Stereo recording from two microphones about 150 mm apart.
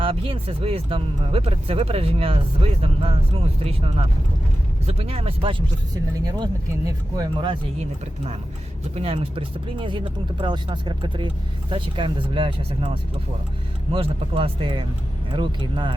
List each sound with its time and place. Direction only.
0.0 s speech: 35° right (ahead or behind)
9.0 s speech: 40° right (ahead or behind)